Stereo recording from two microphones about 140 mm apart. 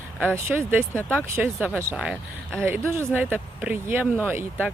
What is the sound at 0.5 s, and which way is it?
Speech, 15° right (ahead or behind).